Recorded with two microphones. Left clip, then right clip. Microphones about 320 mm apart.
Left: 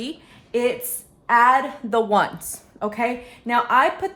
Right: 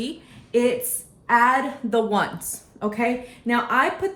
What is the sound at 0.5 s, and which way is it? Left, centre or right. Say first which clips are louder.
A woman's voice: right 1 dB; centre.